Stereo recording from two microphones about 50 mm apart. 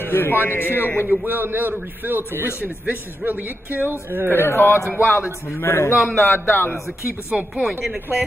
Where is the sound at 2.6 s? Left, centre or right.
Right.